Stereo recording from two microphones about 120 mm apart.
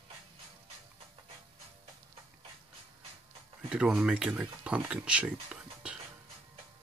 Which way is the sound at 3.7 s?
5° right (ahead or behind).